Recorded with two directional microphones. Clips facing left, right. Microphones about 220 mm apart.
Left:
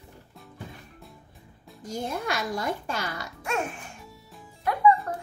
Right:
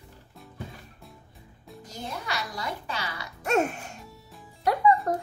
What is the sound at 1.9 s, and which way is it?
A child's voice, 50° left (ahead or behind).